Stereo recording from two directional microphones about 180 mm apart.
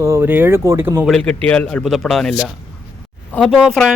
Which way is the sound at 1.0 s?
5° left (ahead or behind).